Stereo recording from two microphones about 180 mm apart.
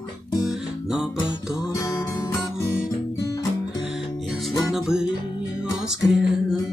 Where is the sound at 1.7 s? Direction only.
20° left (ahead or behind).